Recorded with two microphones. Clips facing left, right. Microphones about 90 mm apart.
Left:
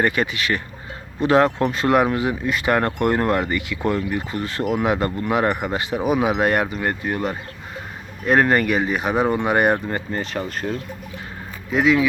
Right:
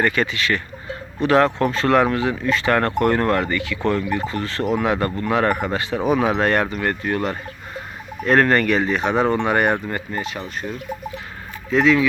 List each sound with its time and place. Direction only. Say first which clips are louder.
0.0 s speech: even; 20° left (ahead or behind)
9.9 s speech: left 1 dB; 35° left (ahead or behind)
11.7 s speech: right 1 dB; 10° left (ahead or behind)